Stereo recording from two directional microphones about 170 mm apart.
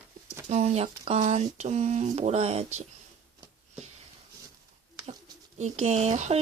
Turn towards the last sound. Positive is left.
turn(degrees=-40)  # may be behind; listen again after turning